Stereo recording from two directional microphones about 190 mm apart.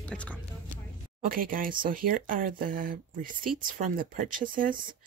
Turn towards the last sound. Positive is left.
turn(degrees=-45)  # may be behind; listen again after turning